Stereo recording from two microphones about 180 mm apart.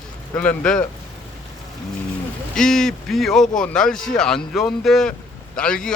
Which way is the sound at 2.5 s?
5° left (ahead or behind).